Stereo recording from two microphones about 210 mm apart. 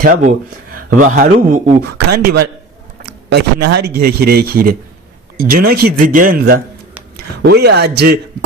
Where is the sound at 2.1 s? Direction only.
50° right (ahead or behind).